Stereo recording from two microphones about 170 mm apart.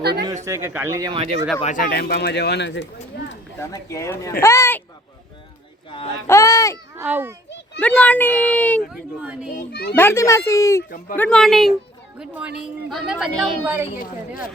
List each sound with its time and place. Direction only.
0.0 s speech: 70° right (ahead or behind)
0.4 s speech: 15° right (ahead or behind)
0.9 s speech: 25° right (ahead or behind)
1.6 s speech: 55° left (ahead or behind); by 2.8 s 90° left
3.6 s speech: 20° left (ahead or behind)
6.2 s speech: 15° left (ahead or behind)
6.9 s a child's voice: 15° right (ahead or behind)
7.8 s speech: 10° left (ahead or behind)
8.9 s speech: 5° right (ahead or behind)
9.5 s a child's voice: 60° left (ahead or behind)
10.0 s speech: 15° left (ahead or behind)
11.2 s a woman's voice: 5° left (ahead or behind)